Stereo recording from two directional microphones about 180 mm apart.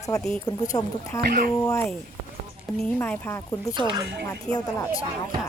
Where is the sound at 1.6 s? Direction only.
15° left (ahead or behind).